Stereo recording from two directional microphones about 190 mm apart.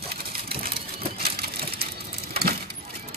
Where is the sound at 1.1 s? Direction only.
55° right (ahead or behind).